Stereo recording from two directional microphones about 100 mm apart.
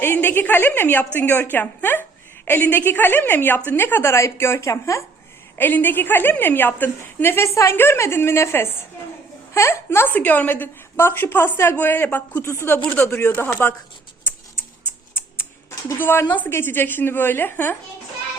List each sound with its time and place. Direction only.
0.0 s a woman's voice: 20° left (ahead or behind)
5.5 s a woman's voice: 20° left (ahead or behind)
15.1 s typing: 25° left (ahead or behind)
16.0 s a woman's voice: 20° left (ahead or behind)